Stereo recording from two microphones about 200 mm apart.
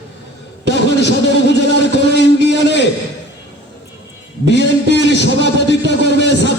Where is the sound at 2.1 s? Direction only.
60° left (ahead or behind).